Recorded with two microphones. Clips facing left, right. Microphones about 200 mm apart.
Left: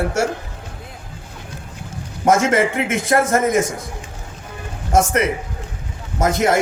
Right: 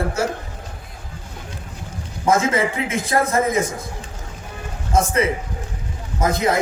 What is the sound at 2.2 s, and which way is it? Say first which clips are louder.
A man's voice: left 3 dB; 80° left.